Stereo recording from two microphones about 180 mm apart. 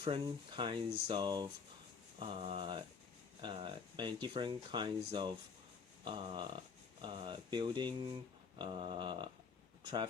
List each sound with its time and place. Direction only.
0.0 s speech: 25° right (ahead or behind)